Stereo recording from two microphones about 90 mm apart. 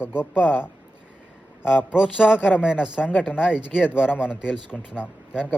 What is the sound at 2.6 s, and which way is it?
Speech, 10° right (ahead or behind).